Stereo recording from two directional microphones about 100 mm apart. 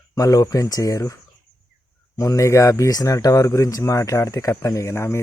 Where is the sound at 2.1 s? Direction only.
35° left (ahead or behind).